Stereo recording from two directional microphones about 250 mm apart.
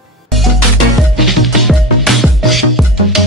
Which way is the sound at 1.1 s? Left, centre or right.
Centre.